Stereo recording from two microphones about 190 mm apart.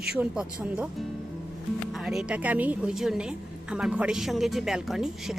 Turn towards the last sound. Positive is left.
turn(degrees=0)  # may be behind; listen again after turning